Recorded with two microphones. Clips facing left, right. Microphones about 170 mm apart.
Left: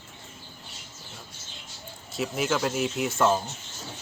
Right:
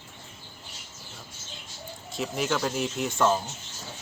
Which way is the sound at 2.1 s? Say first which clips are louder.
Left 1 dB; centre (ahead or behind).